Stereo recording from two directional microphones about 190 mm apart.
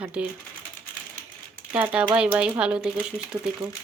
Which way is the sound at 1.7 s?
5° right (ahead or behind).